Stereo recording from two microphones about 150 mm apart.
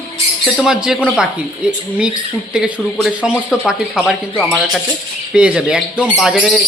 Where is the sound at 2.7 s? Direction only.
Centre (ahead or behind).